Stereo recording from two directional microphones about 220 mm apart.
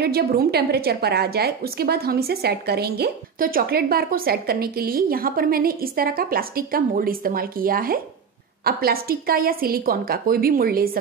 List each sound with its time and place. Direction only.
0.0 s a woman's voice: 45° right (ahead or behind)